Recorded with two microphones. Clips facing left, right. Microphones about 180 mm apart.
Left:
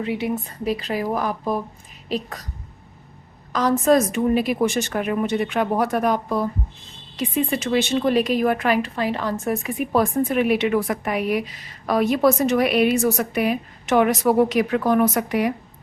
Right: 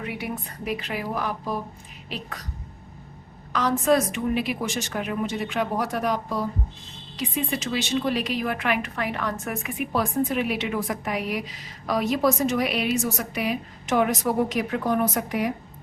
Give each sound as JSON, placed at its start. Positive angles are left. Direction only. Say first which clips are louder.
{"t": 0.0, "sound": "a woman's voice", "louder": "left 7 dB", "side_deg": 25}
{"t": 3.5, "sound": "a woman's voice", "louder": "left 4 dB", "side_deg": 40}
{"t": 13.9, "sound": "a woman's voice", "louder": "left 5 dB", "side_deg": 75}